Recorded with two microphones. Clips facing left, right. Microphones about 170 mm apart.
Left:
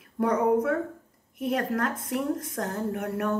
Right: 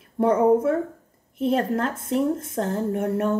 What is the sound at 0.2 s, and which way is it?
A woman's voice, 25° right (ahead or behind).